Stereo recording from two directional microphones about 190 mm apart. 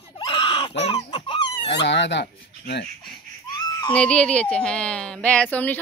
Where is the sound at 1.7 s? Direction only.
65° left (ahead or behind).